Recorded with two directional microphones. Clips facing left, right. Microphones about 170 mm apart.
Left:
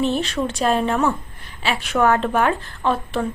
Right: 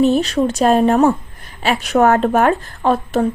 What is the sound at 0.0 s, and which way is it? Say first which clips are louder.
A woman's voice: right 7 dB; 40° right (ahead or behind).